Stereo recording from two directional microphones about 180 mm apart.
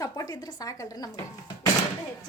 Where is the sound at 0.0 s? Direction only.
20° left (ahead or behind).